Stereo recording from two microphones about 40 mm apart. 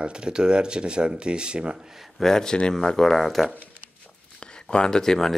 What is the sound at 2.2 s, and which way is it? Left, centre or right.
Speech, centre.